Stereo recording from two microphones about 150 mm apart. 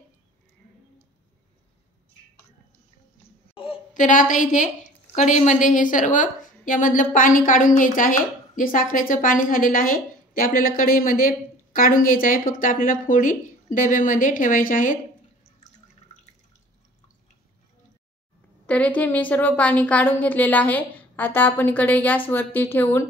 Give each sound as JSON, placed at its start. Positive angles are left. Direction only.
{"t": 3.9, "sound": "a woman's voice", "side_deg": 60}
{"t": 18.7, "sound": "a woman's voice", "side_deg": 10}